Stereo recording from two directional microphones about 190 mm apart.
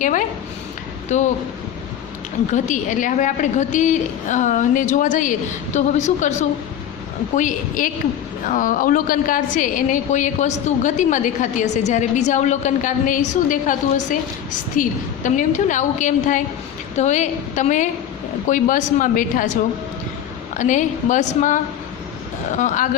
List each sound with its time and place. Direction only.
0.0 s a woman's voice: 45° left (ahead or behind)
2.5 s a woman's voice: 40° left (ahead or behind)
7.3 s a woman's voice: 40° left (ahead or behind)
20.6 s a woman's voice: 40° left (ahead or behind)